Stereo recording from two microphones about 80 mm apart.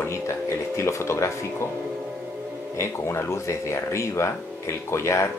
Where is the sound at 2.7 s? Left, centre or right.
Left.